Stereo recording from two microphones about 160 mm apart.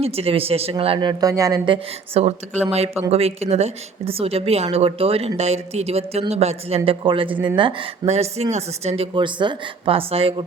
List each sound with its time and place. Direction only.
0.0 s a woman's voice: 40° right (ahead or behind)
0.9 s a woman's voice: 25° right (ahead or behind)
7.3 s speech: 10° right (ahead or behind)
7.5 s a woman's voice: 30° right (ahead or behind)
9.1 s a woman's voice: 30° right (ahead or behind)